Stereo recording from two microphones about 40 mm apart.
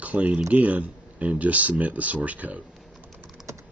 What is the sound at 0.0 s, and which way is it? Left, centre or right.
Speech, right.